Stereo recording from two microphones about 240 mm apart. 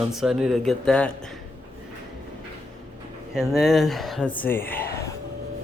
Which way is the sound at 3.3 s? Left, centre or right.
Centre.